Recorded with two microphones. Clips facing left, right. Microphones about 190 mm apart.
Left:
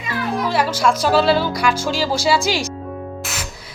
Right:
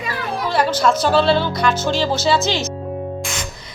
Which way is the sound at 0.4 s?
5° left (ahead or behind).